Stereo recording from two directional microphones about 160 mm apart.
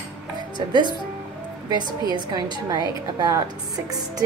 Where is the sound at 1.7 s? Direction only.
25° right (ahead or behind).